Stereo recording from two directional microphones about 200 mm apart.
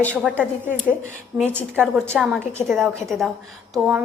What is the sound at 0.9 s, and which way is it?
A woman's voice, 10° right (ahead or behind).